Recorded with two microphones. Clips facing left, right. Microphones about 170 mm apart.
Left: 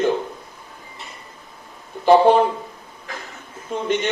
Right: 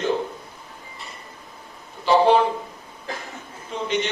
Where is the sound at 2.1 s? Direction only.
50° left (ahead or behind).